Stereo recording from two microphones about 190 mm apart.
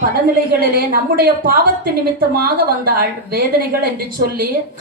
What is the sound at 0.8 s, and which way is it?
A woman's voice, 50° right (ahead or behind).